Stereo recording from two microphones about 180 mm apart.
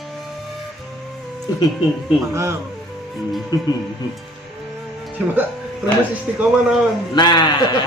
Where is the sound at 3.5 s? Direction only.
25° left (ahead or behind).